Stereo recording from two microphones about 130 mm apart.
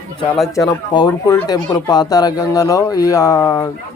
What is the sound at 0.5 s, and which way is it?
Speech, 30° left (ahead or behind).